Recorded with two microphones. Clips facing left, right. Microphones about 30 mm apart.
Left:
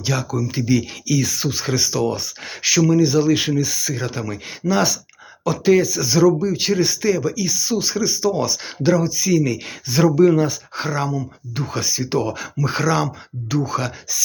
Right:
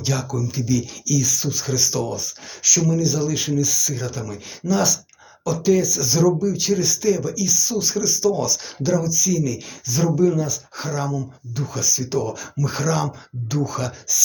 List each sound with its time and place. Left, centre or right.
0.0 s speech: centre
0.5 s speech: left
2.1 s speech: left
11.5 s speech: left